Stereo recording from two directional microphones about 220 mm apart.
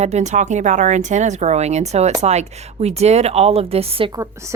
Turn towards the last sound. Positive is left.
turn(degrees=-25)  # may be behind; listen again after turning